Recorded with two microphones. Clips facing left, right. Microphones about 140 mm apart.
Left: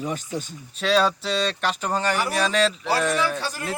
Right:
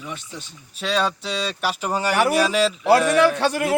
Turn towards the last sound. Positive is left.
turn(degrees=-65)  # may be behind; listen again after turning